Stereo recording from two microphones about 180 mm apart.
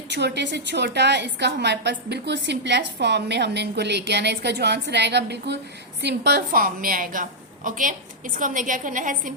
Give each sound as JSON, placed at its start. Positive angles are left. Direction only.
{"t": 0.1, "sound": "a woman's voice", "side_deg": -70}